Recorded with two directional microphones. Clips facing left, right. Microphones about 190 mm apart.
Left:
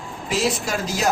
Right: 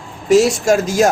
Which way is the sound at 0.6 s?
45° right (ahead or behind).